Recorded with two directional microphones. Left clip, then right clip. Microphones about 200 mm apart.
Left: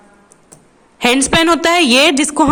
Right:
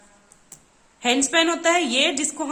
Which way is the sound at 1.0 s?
50° left (ahead or behind).